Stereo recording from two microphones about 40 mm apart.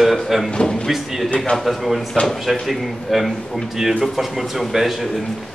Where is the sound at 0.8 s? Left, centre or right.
Centre.